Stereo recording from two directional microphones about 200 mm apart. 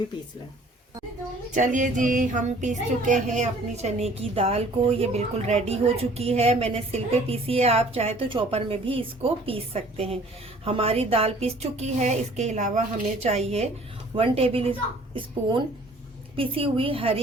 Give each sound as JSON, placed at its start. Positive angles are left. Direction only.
{"t": 1.5, "sound": "a child's voice", "side_deg": -40}